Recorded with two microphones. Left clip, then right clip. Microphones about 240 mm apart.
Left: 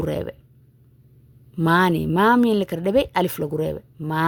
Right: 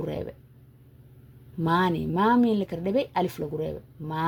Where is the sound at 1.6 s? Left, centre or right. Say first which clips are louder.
Left 6 dB; left.